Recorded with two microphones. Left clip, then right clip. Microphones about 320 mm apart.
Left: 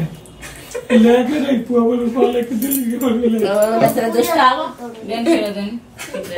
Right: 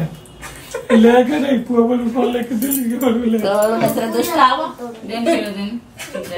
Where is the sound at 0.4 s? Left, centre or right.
Centre.